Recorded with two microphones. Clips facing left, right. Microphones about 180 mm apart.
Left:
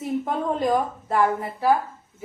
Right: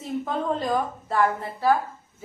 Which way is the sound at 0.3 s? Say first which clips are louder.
Left 2 dB; 15° left (ahead or behind).